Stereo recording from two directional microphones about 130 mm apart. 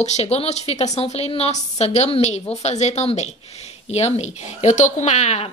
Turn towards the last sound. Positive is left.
turn(degrees=60)  # may be behind; listen again after turning